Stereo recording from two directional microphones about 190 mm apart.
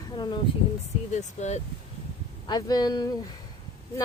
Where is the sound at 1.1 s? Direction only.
35° left (ahead or behind).